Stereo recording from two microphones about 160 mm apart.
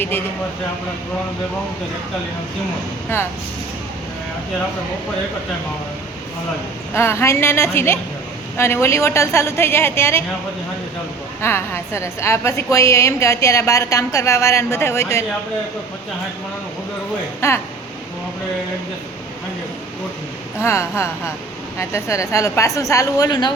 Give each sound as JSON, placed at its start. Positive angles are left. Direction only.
{"t": 3.1, "sound": "a woman's voice", "side_deg": 15}
{"t": 6.9, "sound": "a woman's voice", "side_deg": 15}
{"t": 11.4, "sound": "a woman's voice", "side_deg": 15}
{"t": 17.4, "sound": "a woman's voice", "side_deg": 15}
{"t": 20.6, "sound": "a woman's voice", "side_deg": 15}